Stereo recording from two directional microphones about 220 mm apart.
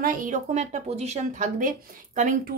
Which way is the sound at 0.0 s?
40° right (ahead or behind).